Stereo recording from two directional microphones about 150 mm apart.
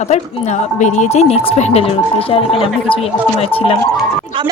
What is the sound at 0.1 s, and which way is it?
Speech, 50° left (ahead or behind).